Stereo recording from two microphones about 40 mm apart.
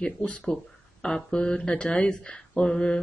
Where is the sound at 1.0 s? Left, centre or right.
Centre.